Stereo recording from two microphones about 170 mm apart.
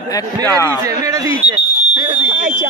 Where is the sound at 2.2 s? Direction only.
55° right (ahead or behind).